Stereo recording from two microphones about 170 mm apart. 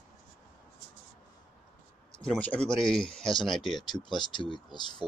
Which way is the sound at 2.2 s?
5° left (ahead or behind).